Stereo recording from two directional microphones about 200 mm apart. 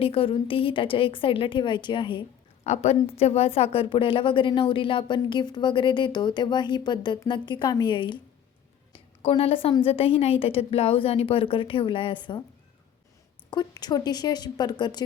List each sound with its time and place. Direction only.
0.0 s a woman's voice: 25° left (ahead or behind)
2.6 s a woman's voice: 35° left (ahead or behind)
9.2 s a woman's voice: 30° left (ahead or behind)
13.5 s a woman's voice: 20° left (ahead or behind)